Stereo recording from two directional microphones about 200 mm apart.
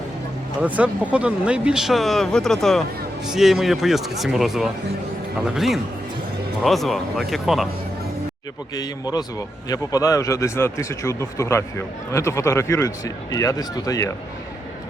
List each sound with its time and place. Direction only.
0.6 s speech: 5° right (ahead or behind)
8.7 s speech: 20° left (ahead or behind)